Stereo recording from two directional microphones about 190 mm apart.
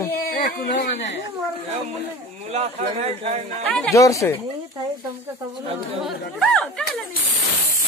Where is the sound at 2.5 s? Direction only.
35° right (ahead or behind).